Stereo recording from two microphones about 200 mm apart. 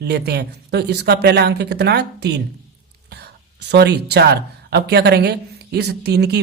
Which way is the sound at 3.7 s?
55° right (ahead or behind).